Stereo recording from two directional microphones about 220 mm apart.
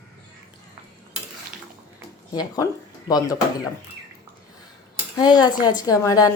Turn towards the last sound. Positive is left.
turn(degrees=15)  # may be behind; listen again after turning